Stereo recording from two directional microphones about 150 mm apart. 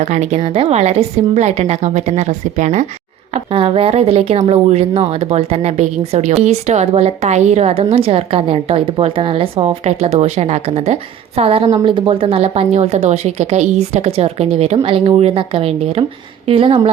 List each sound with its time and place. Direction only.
0.0 s speech: 50° right (ahead or behind)
3.3 s a woman's voice: 35° right (ahead or behind)